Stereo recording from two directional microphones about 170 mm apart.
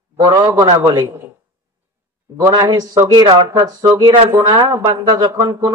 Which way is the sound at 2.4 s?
20° right (ahead or behind).